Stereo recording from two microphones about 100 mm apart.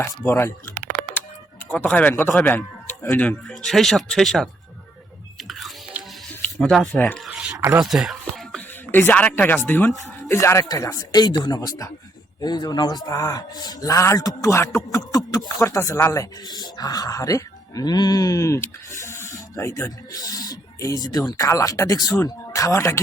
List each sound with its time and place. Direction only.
0.0 s speech: 25° left (ahead or behind)
1.8 s a man's voice: 15° left (ahead or behind)
3.5 s speech: 5° left (ahead or behind)
5.4 s chewing: centre (ahead or behind)
6.0 s music: 15° right (ahead or behind)
6.6 s a man's voice: 5° left (ahead or behind)
7.3 s a sound: 5° right (ahead or behind)
7.8 s speech: 5° right (ahead or behind)
8.2 s a sound: 10° left (ahead or behind)
8.9 s speech: 20° left (ahead or behind)